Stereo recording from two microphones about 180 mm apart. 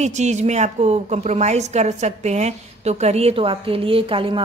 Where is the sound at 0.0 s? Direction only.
40° right (ahead or behind).